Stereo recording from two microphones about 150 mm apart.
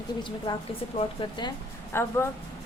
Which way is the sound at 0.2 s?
30° left (ahead or behind).